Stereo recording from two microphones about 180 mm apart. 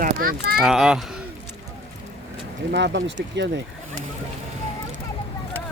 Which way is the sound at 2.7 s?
70° right (ahead or behind).